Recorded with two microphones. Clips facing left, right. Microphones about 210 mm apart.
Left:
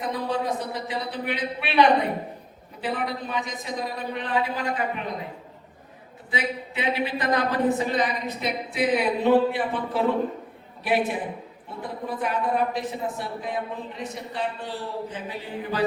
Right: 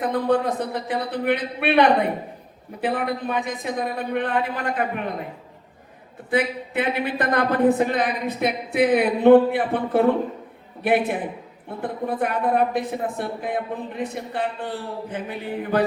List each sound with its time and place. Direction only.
0.0 s speech: 55° right (ahead or behind)
2.8 s speech: 55° right (ahead or behind)
6.3 s speech: 55° right (ahead or behind)